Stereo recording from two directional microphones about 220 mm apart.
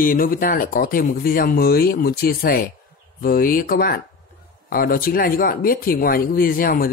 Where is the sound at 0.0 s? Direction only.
40° left (ahead or behind).